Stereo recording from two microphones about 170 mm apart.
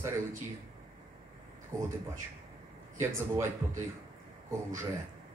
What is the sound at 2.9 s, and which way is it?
Speech, 15° right (ahead or behind).